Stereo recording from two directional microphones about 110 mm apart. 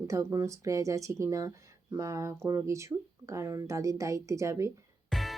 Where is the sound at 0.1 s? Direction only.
25° right (ahead or behind).